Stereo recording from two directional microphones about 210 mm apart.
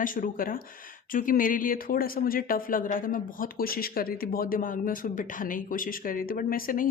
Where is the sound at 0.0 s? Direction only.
40° left (ahead or behind).